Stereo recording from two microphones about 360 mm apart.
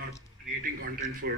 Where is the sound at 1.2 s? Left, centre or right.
Right.